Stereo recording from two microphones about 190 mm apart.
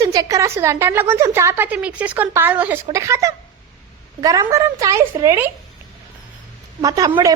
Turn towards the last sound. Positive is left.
turn(degrees=-20)  # may be behind; listen again after turning